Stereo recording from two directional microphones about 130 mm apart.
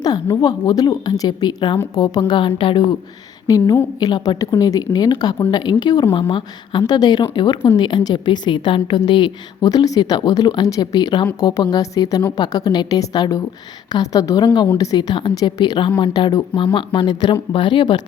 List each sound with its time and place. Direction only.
0.0 s a woman's voice: 30° left (ahead or behind)
3.4 s a woman's voice: 30° left (ahead or behind)